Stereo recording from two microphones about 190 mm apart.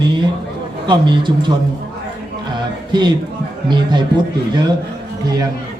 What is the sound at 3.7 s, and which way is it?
Speech, 25° right (ahead or behind).